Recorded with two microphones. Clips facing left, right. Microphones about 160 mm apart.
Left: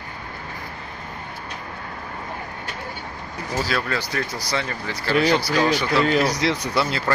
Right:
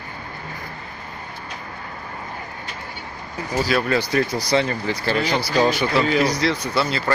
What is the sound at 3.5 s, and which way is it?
Speech, 10° right (ahead or behind).